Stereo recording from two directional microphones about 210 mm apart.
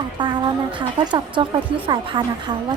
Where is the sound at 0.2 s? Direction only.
20° right (ahead or behind).